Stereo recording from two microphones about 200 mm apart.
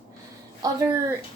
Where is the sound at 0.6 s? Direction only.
15° right (ahead or behind).